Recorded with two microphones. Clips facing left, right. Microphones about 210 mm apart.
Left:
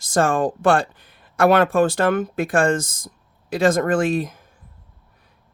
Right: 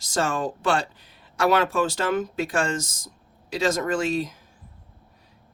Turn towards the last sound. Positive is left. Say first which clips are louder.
# left 5 dB
turn(degrees=55)  # may be behind; listen again after turning